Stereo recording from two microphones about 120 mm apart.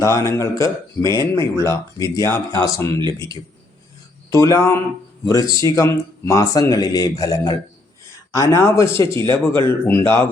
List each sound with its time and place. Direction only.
0.0 s speech: 25° left (ahead or behind)
4.3 s speech: 25° left (ahead or behind)